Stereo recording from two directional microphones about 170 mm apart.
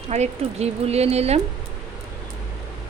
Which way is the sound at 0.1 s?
40° right (ahead or behind).